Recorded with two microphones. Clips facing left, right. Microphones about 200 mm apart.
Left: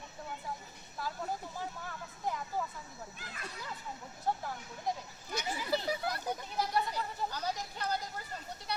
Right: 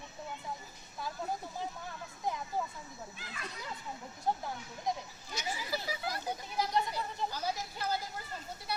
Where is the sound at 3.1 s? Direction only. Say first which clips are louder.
Right 1 dB; 45° left (ahead or behind).